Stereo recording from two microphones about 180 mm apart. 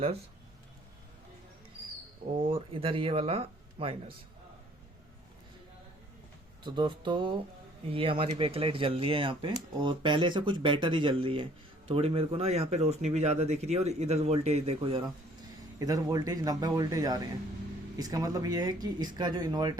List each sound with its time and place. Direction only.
2.5 s speech: 30° right (ahead or behind)
6.6 s speech: 25° right (ahead or behind)
15.8 s speech: 20° right (ahead or behind)